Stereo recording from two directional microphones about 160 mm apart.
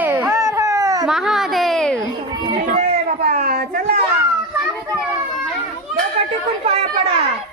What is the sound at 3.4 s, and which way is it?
Speech, 70° right (ahead or behind).